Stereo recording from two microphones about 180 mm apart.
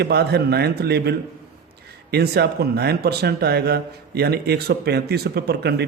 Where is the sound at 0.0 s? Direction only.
65° right (ahead or behind).